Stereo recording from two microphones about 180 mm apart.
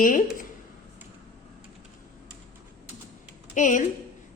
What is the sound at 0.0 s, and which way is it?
Speech, 50° left (ahead or behind).